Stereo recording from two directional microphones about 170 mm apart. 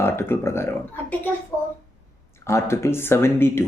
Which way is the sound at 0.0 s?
15° left (ahead or behind).